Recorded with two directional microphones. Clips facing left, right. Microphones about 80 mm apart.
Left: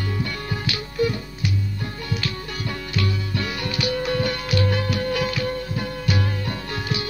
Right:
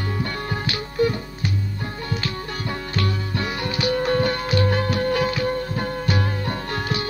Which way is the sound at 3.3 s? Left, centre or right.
Right.